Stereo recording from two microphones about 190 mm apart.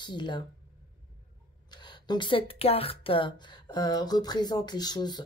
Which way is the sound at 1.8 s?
25° left (ahead or behind).